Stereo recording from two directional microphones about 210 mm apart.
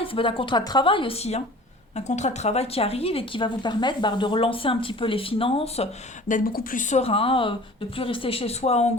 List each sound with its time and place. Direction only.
0.0 s a woman's voice: 25° left (ahead or behind)